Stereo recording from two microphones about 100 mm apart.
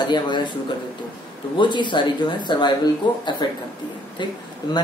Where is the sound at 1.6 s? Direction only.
50° left (ahead or behind).